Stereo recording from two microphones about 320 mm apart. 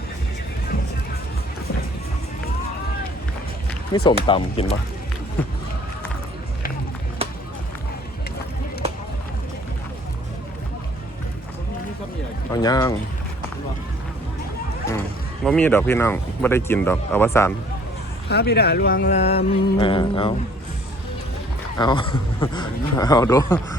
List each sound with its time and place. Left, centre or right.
3.9 s speech: centre
12.5 s speech: centre
15.4 s speech: centre
18.3 s speech: left; by 20.3 s centre
21.8 s speech: centre